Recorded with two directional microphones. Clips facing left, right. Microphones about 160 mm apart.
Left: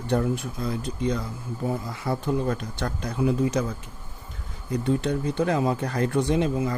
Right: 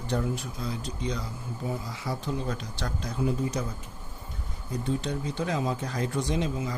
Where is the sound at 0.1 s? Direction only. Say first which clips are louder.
Left 5 dB; 55° left (ahead or behind); by 3.6 s 75° left (ahead or behind).